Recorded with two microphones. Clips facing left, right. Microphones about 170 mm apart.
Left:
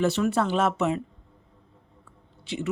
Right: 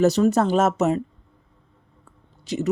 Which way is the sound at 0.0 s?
40° right (ahead or behind).